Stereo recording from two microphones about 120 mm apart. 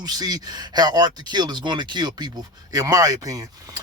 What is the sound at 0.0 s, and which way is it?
Speech, 35° right (ahead or behind).